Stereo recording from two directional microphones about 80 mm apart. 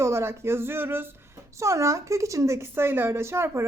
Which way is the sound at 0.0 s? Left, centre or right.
Right.